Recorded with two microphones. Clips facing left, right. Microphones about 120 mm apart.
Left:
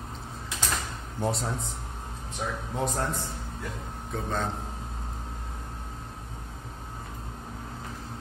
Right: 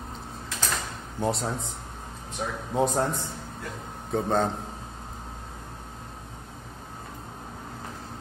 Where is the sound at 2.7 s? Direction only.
20° right (ahead or behind).